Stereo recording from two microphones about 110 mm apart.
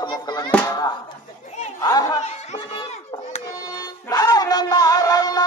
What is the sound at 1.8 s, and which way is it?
Crowd, 35° left (ahead or behind).